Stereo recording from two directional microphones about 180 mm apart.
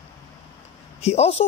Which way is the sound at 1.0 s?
35° left (ahead or behind).